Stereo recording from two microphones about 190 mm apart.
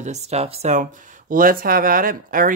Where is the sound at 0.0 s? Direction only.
35° right (ahead or behind).